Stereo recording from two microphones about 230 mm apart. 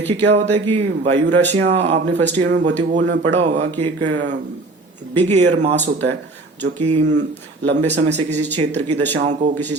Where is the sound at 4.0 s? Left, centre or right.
Right.